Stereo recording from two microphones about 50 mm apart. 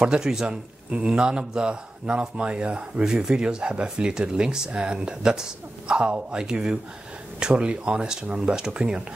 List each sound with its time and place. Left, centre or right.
0.0 s speech: centre